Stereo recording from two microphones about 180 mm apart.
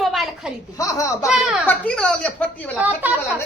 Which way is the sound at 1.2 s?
5° right (ahead or behind).